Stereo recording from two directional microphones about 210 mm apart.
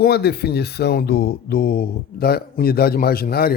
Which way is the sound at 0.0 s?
50° left (ahead or behind).